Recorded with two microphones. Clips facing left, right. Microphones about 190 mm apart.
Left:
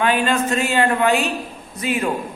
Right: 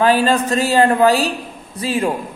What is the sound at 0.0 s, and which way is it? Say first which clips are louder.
A man's voice: right 4 dB; 35° right (ahead or behind).